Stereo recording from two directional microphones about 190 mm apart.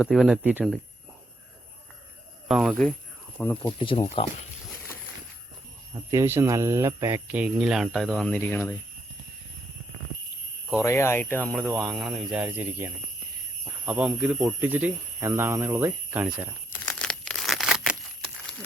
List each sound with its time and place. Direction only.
0.0 s speech: centre (ahead or behind)
2.5 s speech: centre (ahead or behind)
3.8 s speech: 25° left (ahead or behind)
5.9 s speech: 15° right (ahead or behind); by 8.7 s 10° left (ahead or behind)
10.8 s speech: 15° left (ahead or behind); by 16.5 s 10° right (ahead or behind)
16.8 s crumpling: 5° left (ahead or behind)